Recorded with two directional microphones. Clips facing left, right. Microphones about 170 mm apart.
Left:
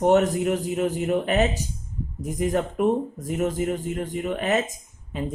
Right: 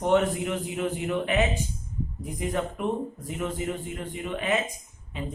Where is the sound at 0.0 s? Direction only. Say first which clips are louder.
Left 4 dB; 45° left (ahead or behind).